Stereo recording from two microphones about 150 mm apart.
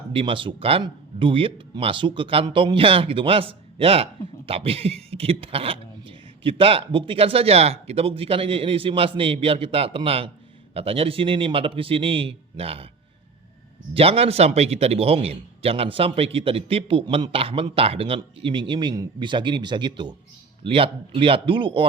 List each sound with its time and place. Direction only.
0.1 s speech: 35° right (ahead or behind)
13.9 s speech: 40° right (ahead or behind)